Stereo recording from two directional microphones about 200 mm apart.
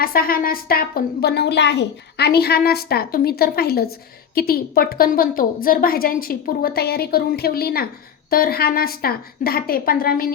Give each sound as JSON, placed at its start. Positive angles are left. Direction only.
{"t": 0.0, "sound": "a woman's voice", "side_deg": 45}